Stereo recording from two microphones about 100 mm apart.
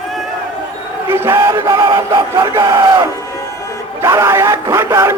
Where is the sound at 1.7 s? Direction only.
45° right (ahead or behind).